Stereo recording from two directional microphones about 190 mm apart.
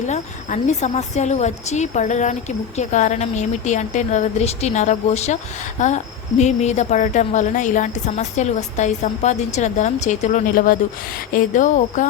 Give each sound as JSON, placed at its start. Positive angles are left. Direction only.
{"t": 0.1, "sound": "speech", "side_deg": 40}